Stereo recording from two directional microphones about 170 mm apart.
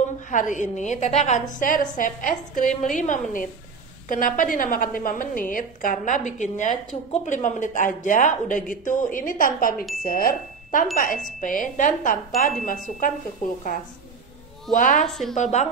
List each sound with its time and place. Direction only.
0.3 s a woman's voice: 50° left (ahead or behind)